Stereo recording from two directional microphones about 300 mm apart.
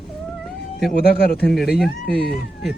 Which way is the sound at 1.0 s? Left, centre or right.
Left.